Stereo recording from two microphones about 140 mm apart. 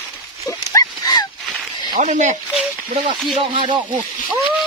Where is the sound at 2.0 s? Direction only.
60° right (ahead or behind).